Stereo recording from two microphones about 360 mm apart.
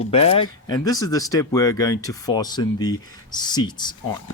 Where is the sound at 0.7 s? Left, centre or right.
Centre.